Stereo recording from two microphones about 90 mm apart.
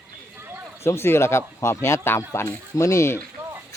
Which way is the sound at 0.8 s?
30° left (ahead or behind).